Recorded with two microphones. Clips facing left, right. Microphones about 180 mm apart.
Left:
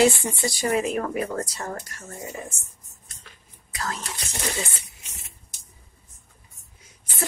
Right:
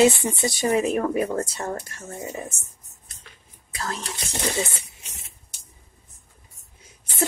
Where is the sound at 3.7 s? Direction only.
30° right (ahead or behind).